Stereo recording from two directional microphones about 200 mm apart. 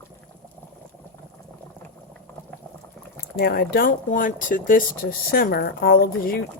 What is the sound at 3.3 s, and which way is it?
Speech, 50° left (ahead or behind).